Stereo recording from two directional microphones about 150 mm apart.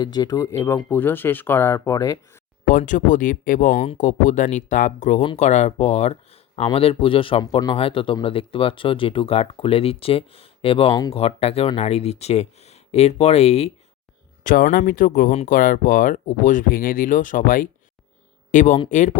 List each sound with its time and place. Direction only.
0.0 s speech: 25° left (ahead or behind)
2.6 s speech: 60° left (ahead or behind)
14.4 s speech: 65° left (ahead or behind)
18.5 s speech: 55° left (ahead or behind)